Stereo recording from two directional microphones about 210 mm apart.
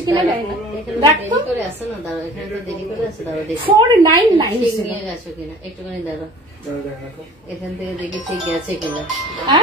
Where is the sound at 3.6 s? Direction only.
20° right (ahead or behind).